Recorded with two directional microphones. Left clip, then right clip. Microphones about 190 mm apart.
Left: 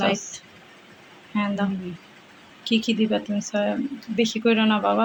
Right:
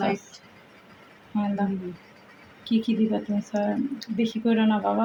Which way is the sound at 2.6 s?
Centre (ahead or behind).